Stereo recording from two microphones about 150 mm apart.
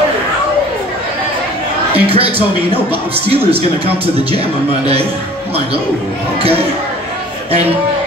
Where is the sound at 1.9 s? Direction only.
40° right (ahead or behind).